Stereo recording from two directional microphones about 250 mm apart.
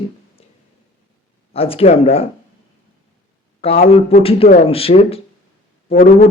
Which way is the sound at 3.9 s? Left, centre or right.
Left.